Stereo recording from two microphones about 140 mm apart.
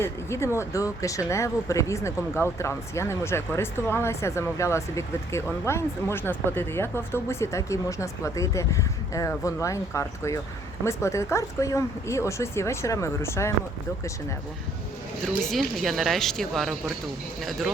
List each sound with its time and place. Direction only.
0.0 s speech: 20° left (ahead or behind)
15.4 s speech: centre (ahead or behind)